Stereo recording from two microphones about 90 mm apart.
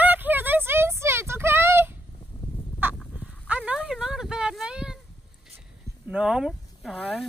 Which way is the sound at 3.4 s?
15° right (ahead or behind).